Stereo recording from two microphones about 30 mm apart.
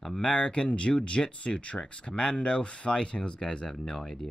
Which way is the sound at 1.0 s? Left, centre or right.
Left.